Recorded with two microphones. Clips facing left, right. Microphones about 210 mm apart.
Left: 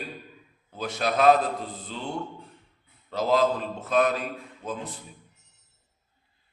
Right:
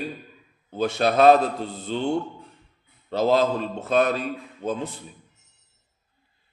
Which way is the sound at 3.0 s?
30° right (ahead or behind).